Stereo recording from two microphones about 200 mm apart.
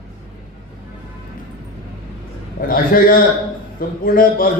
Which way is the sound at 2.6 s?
45° left (ahead or behind).